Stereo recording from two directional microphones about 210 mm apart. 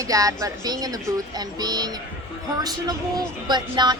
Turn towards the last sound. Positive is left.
turn(degrees=-20)  # may be behind; listen again after turning